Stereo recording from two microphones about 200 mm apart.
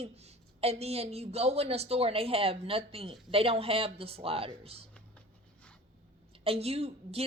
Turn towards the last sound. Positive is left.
turn(degrees=-30)  # may be behind; listen again after turning